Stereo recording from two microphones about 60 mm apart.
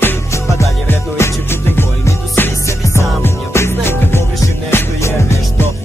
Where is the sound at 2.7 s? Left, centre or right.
Left.